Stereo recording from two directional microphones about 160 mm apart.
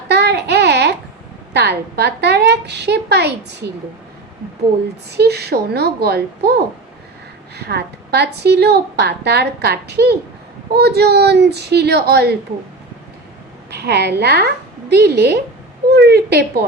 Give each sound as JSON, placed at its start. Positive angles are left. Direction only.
{"t": 0.1, "sound": "a sound", "side_deg": -90}
{"t": 1.5, "sound": "a woman's voice", "side_deg": -90}
{"t": 5.1, "sound": "a woman's voice", "side_deg": -90}
{"t": 7.5, "sound": "a woman's voice", "side_deg": -90}
{"t": 13.7, "sound": "a woman's voice", "side_deg": -90}